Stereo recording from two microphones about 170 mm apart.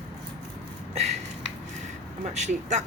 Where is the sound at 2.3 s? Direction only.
40° right (ahead or behind).